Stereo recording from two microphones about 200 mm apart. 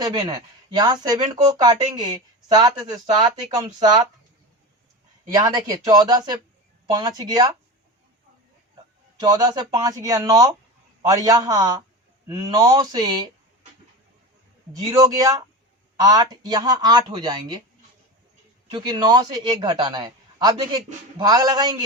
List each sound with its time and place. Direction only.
0.0 s speech: 20° right (ahead or behind)
5.3 s speech: 20° right (ahead or behind)
9.1 s speech: 20° right (ahead or behind)
14.9 s speech: 15° right (ahead or behind)
18.7 s speech: 20° right (ahead or behind)